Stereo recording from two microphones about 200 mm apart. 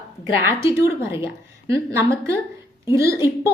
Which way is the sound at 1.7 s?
15° right (ahead or behind).